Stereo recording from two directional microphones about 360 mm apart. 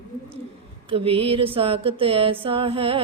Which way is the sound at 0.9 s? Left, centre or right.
Centre.